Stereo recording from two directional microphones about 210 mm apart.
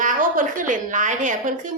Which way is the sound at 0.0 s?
40° right (ahead or behind).